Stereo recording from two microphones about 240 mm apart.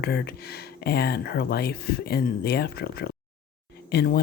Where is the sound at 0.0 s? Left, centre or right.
Left.